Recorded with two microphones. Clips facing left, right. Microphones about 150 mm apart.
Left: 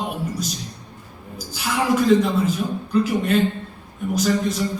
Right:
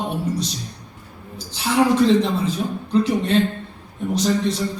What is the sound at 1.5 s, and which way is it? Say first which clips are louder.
Speech: right 4 dB; 30° right (ahead or behind).